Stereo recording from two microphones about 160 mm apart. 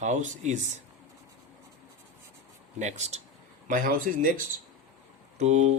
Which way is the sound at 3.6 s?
60° right (ahead or behind).